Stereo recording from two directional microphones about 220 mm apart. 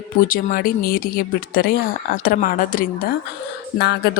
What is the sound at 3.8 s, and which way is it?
Music, 50° left (ahead or behind).